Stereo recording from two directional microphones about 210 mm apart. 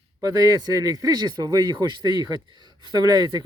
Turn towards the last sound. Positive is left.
turn(degrees=-20)  # may be behind; listen again after turning